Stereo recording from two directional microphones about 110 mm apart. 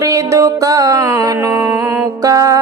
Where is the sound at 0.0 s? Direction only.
30° right (ahead or behind).